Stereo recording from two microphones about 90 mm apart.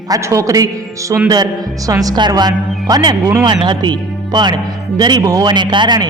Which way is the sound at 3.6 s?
55° right (ahead or behind).